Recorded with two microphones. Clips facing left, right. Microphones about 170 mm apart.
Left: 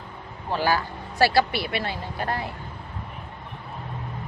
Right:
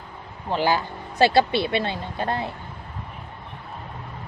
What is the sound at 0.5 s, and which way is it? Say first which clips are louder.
Speech: right 2 dB; 20° right (ahead or behind).